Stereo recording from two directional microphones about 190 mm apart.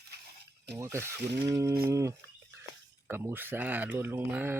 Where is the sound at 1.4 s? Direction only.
15° right (ahead or behind).